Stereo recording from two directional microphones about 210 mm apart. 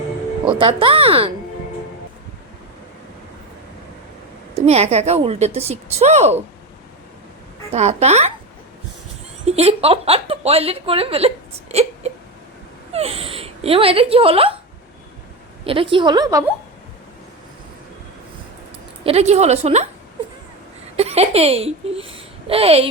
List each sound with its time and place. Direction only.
0.4 s a woman's voice: 25° right (ahead or behind)
4.6 s a woman's voice: 30° right (ahead or behind)
7.7 s a woman's voice: 30° right (ahead or behind)
9.5 s a woman's voice: 30° right (ahead or behind)
11.7 s hiccup: 30° right (ahead or behind)
12.9 s speech: 30° right (ahead or behind)
15.6 s a woman's voice: 25° right (ahead or behind)
19.0 s a woman's voice: 30° right (ahead or behind)
20.9 s a child's voice: 30° right (ahead or behind)